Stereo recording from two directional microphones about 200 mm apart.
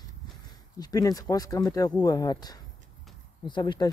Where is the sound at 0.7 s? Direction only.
20° left (ahead or behind).